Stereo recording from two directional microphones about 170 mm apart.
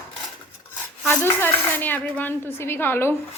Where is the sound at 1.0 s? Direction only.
10° left (ahead or behind).